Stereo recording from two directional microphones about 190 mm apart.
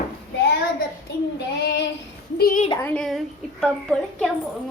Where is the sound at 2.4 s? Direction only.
50° left (ahead or behind).